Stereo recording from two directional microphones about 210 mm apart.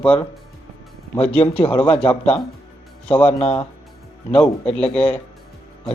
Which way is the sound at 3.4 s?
30° left (ahead or behind).